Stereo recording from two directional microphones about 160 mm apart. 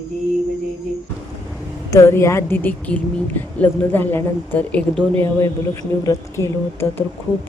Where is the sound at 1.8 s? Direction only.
20° left (ahead or behind).